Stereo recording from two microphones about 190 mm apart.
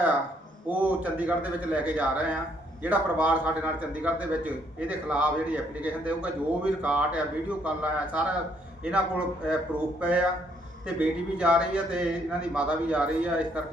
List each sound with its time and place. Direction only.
0.7 s a man's voice: 10° right (ahead or behind)